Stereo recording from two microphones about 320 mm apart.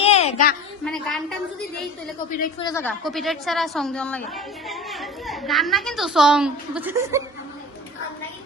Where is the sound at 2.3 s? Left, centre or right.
Left.